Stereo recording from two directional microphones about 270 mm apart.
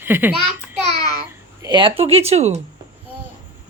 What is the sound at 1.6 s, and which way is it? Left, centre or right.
Speech, centre.